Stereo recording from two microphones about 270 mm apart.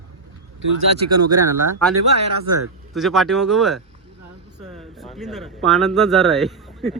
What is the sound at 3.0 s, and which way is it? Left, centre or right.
Speech, centre.